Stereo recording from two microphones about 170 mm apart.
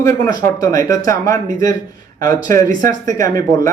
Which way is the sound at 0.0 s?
20° left (ahead or behind).